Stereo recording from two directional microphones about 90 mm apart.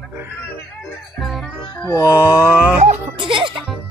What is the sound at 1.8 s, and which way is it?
Music, 40° left (ahead or behind).